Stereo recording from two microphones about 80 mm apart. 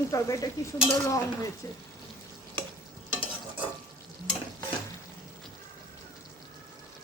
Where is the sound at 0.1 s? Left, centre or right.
Left.